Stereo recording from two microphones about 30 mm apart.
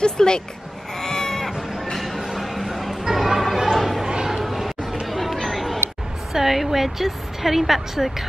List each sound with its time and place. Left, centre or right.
0.0 s speech: left
0.9 s sheep: centre
2.0 s a sound: centre
5.0 s chatter: centre
6.3 s a woman's voice: centre